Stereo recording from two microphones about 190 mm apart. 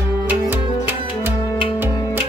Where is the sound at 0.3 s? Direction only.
10° right (ahead or behind).